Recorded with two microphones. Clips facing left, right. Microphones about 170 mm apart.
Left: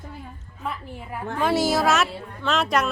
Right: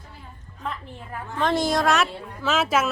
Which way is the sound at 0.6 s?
10° left (ahead or behind).